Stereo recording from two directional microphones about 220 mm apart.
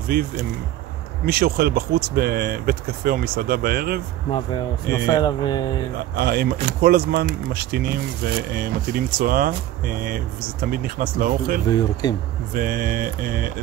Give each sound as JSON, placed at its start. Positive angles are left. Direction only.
{"t": 0.1, "sound": "speech", "side_deg": -45}
{"t": 5.0, "sound": "speech", "side_deg": 20}
{"t": 6.1, "sound": "speech", "side_deg": -45}
{"t": 11.7, "sound": "speech", "side_deg": 20}
{"t": 12.5, "sound": "speech", "side_deg": -40}